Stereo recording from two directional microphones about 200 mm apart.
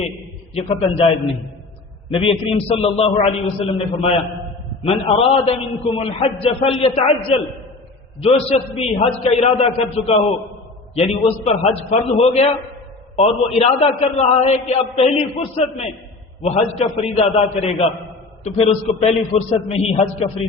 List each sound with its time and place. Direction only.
0.5 s a man's voice: 30° left (ahead or behind)
2.1 s a man's voice: 25° left (ahead or behind)
13.6 s a man's voice: 30° left (ahead or behind)